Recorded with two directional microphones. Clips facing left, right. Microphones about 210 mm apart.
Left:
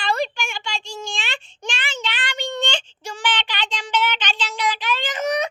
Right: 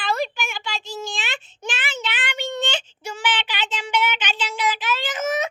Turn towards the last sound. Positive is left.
turn(degrees=-5)  # may be behind; listen again after turning